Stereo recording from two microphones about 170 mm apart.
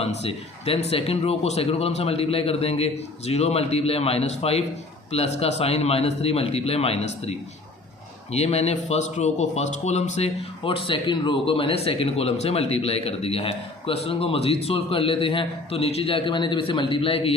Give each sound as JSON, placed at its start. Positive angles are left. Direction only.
{"t": 0.0, "sound": "speech", "side_deg": 35}